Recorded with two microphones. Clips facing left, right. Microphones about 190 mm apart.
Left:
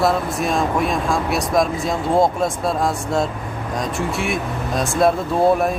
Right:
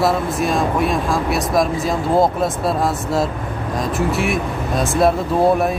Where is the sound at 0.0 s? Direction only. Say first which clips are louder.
Right 1 dB; centre (ahead or behind).